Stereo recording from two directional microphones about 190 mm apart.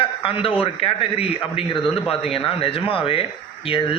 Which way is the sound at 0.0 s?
30° left (ahead or behind).